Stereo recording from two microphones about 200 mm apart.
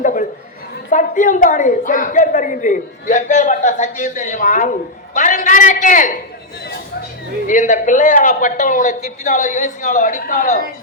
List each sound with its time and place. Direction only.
0.0 s chatter: 40° left (ahead or behind)
0.9 s a woman's voice: 40° left (ahead or behind)
7.4 s a woman's voice: 40° left (ahead or behind)